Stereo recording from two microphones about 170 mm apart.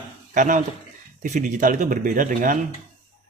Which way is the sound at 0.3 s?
50° right (ahead or behind).